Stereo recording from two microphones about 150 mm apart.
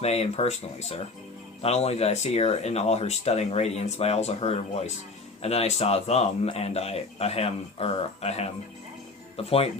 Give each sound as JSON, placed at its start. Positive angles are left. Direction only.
{"t": 0.0, "sound": "speech", "side_deg": 45}